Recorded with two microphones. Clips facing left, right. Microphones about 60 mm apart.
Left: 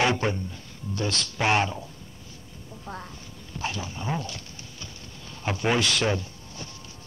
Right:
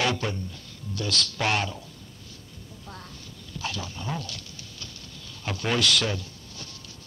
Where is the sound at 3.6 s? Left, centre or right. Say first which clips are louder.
Left 2 dB; left.